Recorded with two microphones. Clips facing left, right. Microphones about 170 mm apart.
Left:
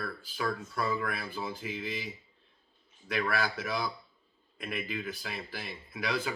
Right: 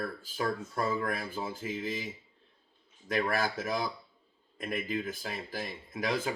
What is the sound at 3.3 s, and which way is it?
Speech, 45° right (ahead or behind).